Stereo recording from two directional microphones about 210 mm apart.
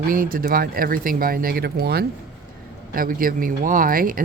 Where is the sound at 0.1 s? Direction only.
40° right (ahead or behind).